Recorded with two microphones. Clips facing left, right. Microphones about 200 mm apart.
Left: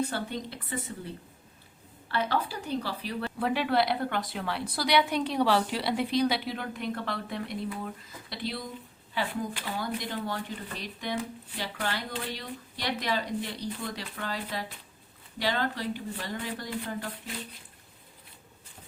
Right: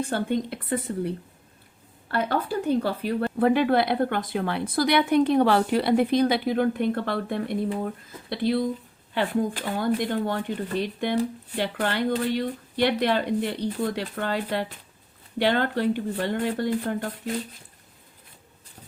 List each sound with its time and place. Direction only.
0.1 s speech: 50° right (ahead or behind)